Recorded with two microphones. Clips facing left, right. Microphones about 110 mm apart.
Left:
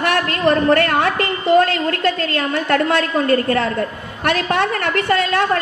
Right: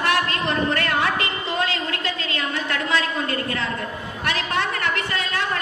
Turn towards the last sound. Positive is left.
turn(degrees=55)  # may be behind; listen again after turning